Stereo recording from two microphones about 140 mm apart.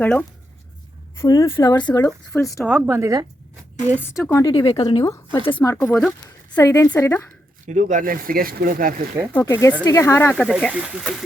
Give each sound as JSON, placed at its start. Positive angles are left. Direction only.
{"t": 0.0, "sound": "a woman's voice", "side_deg": 10}
{"t": 2.3, "sound": "a woman's voice", "side_deg": 15}
{"t": 2.6, "sound": "speech", "side_deg": -5}
{"t": 2.9, "sound": "a woman's voice", "side_deg": -25}
{"t": 3.9, "sound": "a woman's voice", "side_deg": 15}
{"t": 5.7, "sound": "a woman's voice", "side_deg": 15}
{"t": 6.8, "sound": "a woman's voice", "side_deg": 10}
{"t": 7.7, "sound": "speech", "side_deg": -60}
{"t": 9.3, "sound": "speech", "side_deg": 20}
{"t": 10.3, "sound": "speech", "side_deg": 5}